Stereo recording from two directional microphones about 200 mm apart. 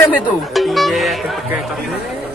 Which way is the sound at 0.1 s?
Centre (ahead or behind).